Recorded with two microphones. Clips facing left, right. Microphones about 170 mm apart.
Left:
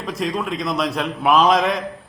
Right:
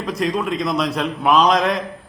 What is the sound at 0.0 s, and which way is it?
A man's voice, centre (ahead or behind).